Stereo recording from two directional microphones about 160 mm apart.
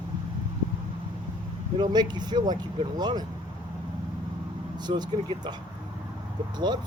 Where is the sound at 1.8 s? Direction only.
25° right (ahead or behind).